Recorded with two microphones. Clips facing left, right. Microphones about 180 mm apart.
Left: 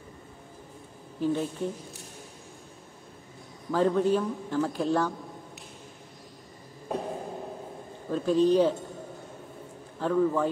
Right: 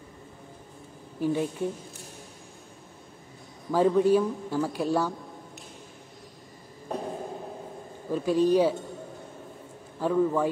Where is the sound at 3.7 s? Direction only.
10° right (ahead or behind).